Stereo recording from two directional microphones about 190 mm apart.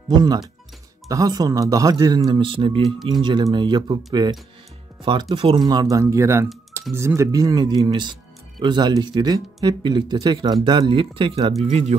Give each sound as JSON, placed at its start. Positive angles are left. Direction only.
{"t": 0.1, "sound": "speech", "side_deg": -20}